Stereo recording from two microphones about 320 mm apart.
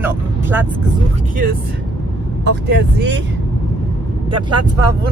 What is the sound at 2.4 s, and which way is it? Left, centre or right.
Speech, right.